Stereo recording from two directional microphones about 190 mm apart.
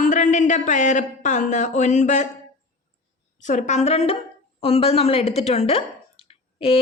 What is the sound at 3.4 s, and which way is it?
A woman's voice, 40° left (ahead or behind).